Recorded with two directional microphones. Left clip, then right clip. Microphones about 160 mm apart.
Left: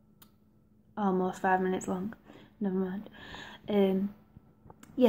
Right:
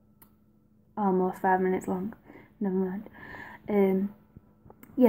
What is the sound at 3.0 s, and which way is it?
A woman's voice, 10° right (ahead or behind).